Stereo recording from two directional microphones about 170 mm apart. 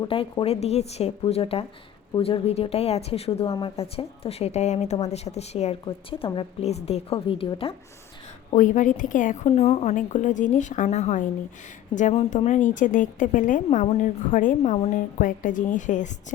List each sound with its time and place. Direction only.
0.0 s a woman's voice: 30° left (ahead or behind)
8.5 s a woman's voice: 50° left (ahead or behind)